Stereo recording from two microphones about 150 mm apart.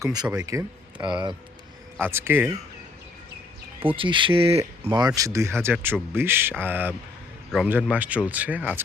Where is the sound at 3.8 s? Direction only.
35° right (ahead or behind).